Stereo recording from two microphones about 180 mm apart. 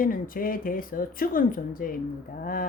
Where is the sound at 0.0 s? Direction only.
50° left (ahead or behind).